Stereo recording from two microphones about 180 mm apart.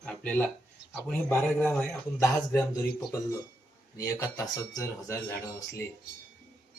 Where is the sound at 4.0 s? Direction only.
20° left (ahead or behind).